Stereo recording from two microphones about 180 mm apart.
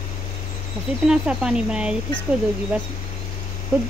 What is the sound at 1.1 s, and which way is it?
Speech, 5° right (ahead or behind).